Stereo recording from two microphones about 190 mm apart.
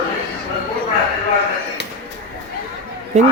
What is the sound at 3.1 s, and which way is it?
Speech, 40° right (ahead or behind).